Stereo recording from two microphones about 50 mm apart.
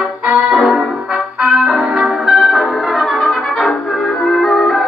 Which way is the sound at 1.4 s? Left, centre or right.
Right.